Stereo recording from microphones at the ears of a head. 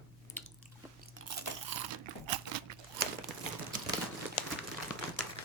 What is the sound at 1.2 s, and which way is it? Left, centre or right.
Crunch, right.